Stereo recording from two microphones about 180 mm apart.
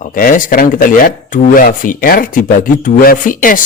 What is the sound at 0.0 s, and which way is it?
Speech, 50° left (ahead or behind).